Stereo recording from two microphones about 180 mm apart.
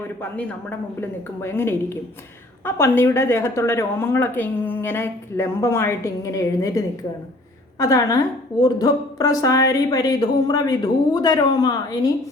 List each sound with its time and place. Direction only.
0.2 s a woman's voice: 10° left (ahead or behind)